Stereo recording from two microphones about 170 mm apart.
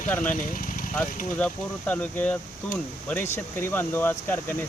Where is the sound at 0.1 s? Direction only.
10° left (ahead or behind).